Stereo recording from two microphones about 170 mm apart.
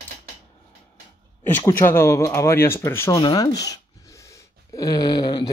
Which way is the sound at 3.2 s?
25° left (ahead or behind).